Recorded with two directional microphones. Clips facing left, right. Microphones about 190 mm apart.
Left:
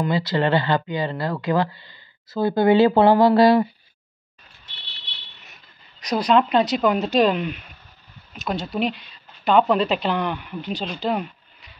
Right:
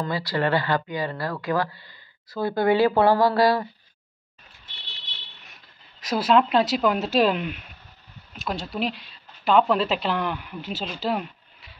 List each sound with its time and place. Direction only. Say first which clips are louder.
0.0 s speech: left 4 dB; 20° left (ahead or behind)
5.4 s speech: left 1 dB; centre (ahead or behind)